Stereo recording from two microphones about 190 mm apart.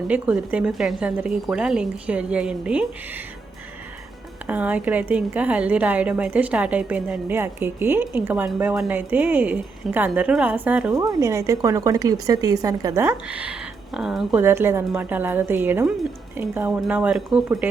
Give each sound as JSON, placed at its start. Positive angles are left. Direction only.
{"t": 0.1, "sound": "speech", "side_deg": -5}
{"t": 4.4, "sound": "a woman's voice", "side_deg": -10}
{"t": 10.9, "sound": "a woman's voice", "side_deg": -20}